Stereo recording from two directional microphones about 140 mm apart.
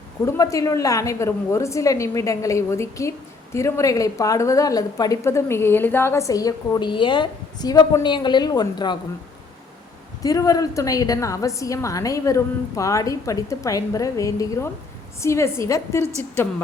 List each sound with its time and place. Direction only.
0.3 s a woman's voice: 25° left (ahead or behind)
10.2 s a woman's voice: 25° left (ahead or behind)